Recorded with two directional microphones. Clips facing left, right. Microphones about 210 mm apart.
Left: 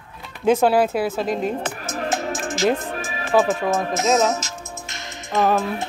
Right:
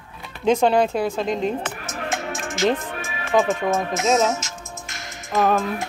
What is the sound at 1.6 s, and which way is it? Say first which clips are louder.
Music: left 3 dB; 35° left (ahead or behind).